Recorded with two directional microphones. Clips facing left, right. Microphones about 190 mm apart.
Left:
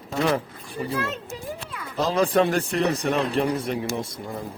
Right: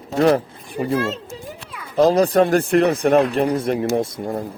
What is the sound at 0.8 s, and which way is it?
Speech, 25° right (ahead or behind).